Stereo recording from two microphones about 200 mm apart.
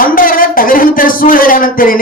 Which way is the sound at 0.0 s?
45° left (ahead or behind).